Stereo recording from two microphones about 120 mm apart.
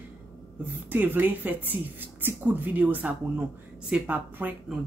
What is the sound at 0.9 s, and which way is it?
Speech, 15° right (ahead or behind).